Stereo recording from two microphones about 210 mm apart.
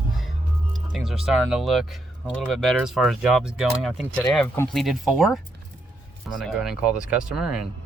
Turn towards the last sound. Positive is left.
turn(degrees=-5)  # may be behind; listen again after turning